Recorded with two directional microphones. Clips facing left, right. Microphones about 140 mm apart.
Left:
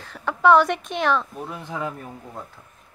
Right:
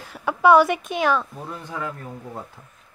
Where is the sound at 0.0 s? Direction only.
10° right (ahead or behind).